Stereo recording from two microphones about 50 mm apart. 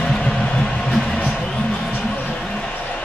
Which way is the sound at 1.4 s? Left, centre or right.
Centre.